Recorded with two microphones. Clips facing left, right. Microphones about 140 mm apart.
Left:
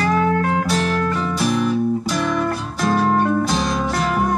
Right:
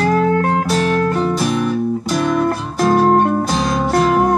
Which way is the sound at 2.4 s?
45° right (ahead or behind).